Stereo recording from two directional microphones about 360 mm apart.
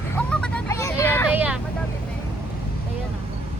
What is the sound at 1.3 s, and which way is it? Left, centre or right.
Vehicle, centre.